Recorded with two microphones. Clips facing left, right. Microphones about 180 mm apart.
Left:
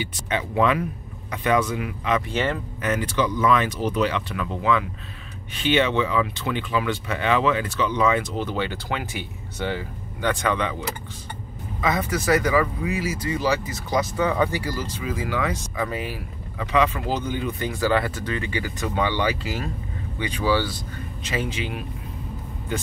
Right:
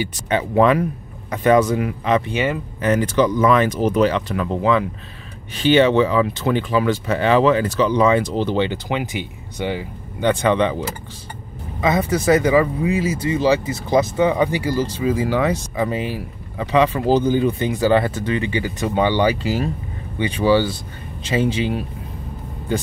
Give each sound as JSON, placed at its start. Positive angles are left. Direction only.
{"t": 0.3, "sound": "speech", "side_deg": -45}
{"t": 2.3, "sound": "speech", "side_deg": -10}
{"t": 2.8, "sound": "speech", "side_deg": -40}
{"t": 10.3, "sound": "speech", "side_deg": -25}
{"t": 11.8, "sound": "speech", "side_deg": -25}